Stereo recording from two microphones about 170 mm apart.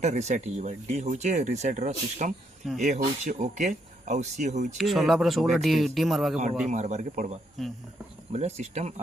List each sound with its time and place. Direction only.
0.0 s speech: 40° right (ahead or behind)
4.8 s speech: centre (ahead or behind)
6.7 s speech: 45° right (ahead or behind)
7.6 s speech: centre (ahead or behind)
8.3 s speech: 40° right (ahead or behind)